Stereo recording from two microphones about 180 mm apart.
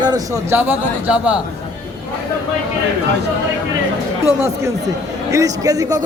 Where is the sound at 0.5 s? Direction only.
10° right (ahead or behind).